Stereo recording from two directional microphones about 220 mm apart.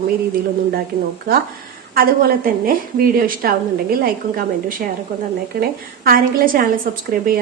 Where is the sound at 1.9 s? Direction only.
40° right (ahead or behind).